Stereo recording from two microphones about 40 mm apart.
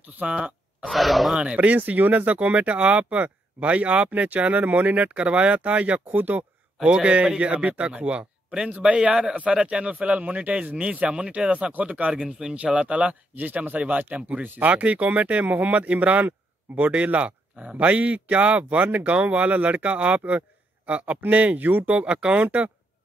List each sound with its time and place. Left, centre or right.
0.2 s speech: right
0.8 s speech: centre
1.3 s a man's voice: right
4.1 s a man's voice: right
6.1 s a sound: right
6.9 s a man's voice: right
8.5 s a man's voice: right
10.9 s a man's voice: right
12.1 s speech: right
12.5 s a man's voice: right
14.8 s a man's voice: right
16.3 s a sound: right
16.9 s a man's voice: right
22.0 s speech: right